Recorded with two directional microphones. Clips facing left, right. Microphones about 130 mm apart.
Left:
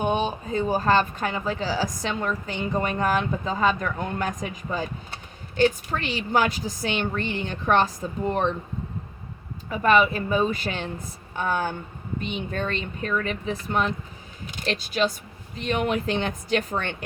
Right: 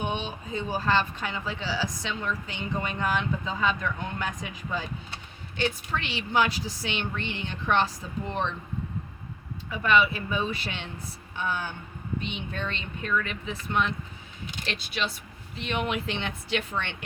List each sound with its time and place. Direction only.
0.0 s speech: 45° left (ahead or behind)
9.6 s speech: 45° left (ahead or behind)